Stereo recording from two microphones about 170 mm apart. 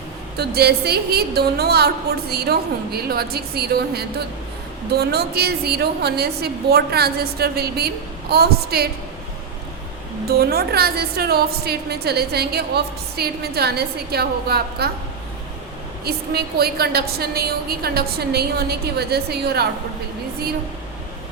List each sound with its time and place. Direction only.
0.3 s a woman's voice: 70° right (ahead or behind)
10.2 s a woman's voice: 65° right (ahead or behind)
16.0 s a woman's voice: 65° right (ahead or behind)